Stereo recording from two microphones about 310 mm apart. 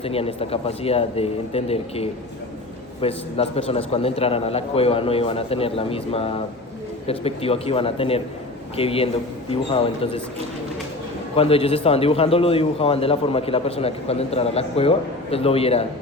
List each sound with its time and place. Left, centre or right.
0.0 s a man's voice: centre
11.3 s a man's voice: centre